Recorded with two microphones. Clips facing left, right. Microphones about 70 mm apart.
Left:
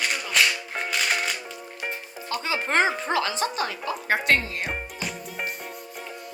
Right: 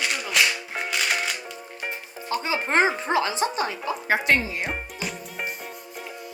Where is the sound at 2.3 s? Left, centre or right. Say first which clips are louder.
Right 2 dB; right.